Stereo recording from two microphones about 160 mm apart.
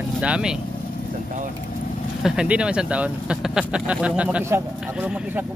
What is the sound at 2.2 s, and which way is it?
Speech, 5° right (ahead or behind).